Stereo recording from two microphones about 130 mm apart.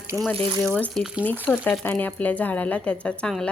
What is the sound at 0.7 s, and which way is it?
Speech, 10° left (ahead or behind).